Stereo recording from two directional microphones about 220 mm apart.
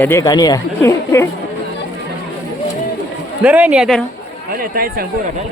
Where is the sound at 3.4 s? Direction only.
5° right (ahead or behind).